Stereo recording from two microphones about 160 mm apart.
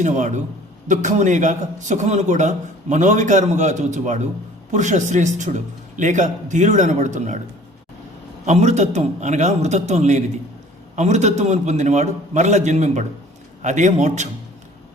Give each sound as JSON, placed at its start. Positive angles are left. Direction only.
{"t": 0.0, "sound": "a man's voice", "side_deg": -50}
{"t": 8.4, "sound": "a man's voice", "side_deg": -45}